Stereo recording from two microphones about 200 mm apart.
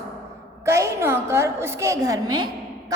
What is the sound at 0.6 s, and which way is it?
A woman's voice, 15° right (ahead or behind).